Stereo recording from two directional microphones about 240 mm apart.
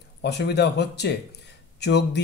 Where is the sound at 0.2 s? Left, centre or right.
Left.